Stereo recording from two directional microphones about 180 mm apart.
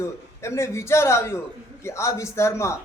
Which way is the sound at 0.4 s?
15° left (ahead or behind).